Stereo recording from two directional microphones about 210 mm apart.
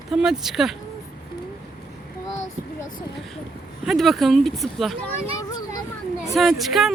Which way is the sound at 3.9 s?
Centre (ahead or behind).